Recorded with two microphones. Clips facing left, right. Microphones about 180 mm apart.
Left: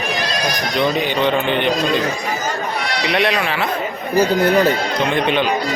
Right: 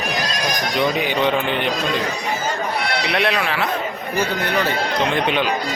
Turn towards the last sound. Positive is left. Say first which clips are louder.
# left 2 dB
turn(degrees=0)  # may be behind; listen again after turning